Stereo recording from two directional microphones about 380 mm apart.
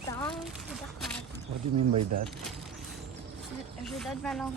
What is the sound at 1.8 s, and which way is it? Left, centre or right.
Speech, right.